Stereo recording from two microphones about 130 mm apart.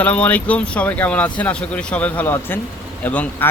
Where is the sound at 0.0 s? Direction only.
10° left (ahead or behind).